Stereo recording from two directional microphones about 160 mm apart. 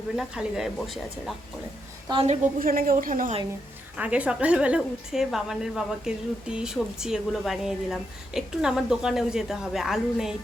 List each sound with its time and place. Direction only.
0.2 s a woman's voice: 5° right (ahead or behind)
2.1 s a woman's voice: 25° right (ahead or behind)
2.6 s a woman's voice: 65° right (ahead or behind)
3.9 s a woman's voice: 10° right (ahead or behind)